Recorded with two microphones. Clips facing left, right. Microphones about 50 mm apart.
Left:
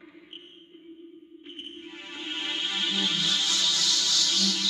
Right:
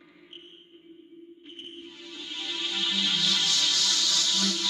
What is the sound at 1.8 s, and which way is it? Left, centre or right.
Music, left.